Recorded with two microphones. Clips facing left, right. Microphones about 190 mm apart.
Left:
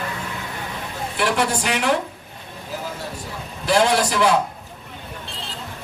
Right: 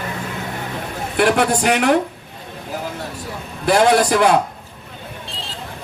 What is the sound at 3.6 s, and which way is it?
Speech, 55° right (ahead or behind).